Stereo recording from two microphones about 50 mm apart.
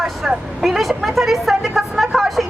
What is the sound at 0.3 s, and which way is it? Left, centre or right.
Speech, centre.